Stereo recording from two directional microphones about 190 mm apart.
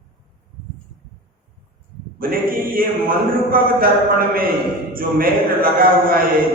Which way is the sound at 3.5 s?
50° right (ahead or behind).